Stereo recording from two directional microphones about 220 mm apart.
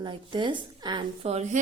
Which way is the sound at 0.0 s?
20° right (ahead or behind).